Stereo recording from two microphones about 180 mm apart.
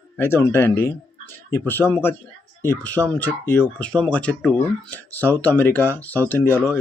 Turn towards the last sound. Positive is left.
turn(degrees=10)  # may be behind; listen again after turning